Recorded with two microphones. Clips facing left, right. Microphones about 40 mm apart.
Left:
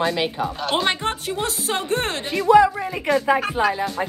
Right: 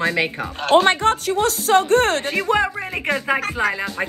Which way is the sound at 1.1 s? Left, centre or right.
Right.